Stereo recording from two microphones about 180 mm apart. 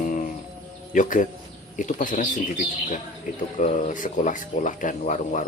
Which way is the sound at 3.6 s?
45° left (ahead or behind).